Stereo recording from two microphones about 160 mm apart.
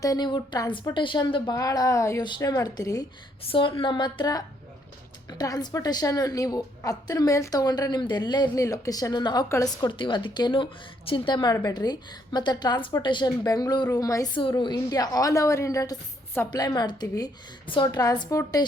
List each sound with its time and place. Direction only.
0.0 s a woman's voice: 25° left (ahead or behind)
3.4 s a woman's voice: 35° left (ahead or behind)